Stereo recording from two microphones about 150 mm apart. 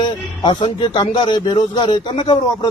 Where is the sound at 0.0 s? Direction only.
30° left (ahead or behind).